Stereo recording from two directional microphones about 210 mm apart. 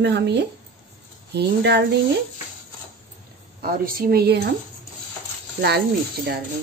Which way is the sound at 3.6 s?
45° right (ahead or behind).